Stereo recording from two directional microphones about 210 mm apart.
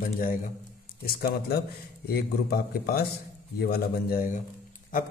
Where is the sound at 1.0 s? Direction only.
45° left (ahead or behind).